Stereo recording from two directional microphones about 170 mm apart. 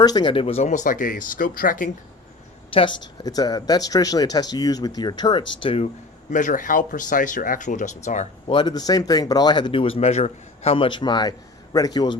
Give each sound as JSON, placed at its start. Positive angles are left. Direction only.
{"t": 0.0, "sound": "speech", "side_deg": 25}
{"t": 2.6, "sound": "speech", "side_deg": 30}
{"t": 6.3, "sound": "speech", "side_deg": 50}
{"t": 8.5, "sound": "speech", "side_deg": 25}